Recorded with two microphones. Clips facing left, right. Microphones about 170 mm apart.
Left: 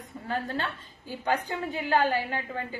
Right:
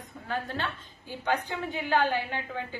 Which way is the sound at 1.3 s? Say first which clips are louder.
Left 1 dB; 40° left (ahead or behind).